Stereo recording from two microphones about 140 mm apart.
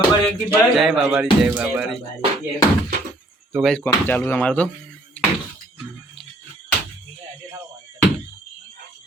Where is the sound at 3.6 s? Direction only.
10° left (ahead or behind).